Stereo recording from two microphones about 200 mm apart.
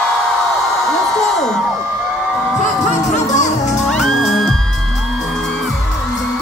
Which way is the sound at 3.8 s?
Centre (ahead or behind).